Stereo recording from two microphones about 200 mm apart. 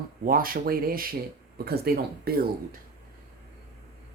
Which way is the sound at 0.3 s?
45° right (ahead or behind).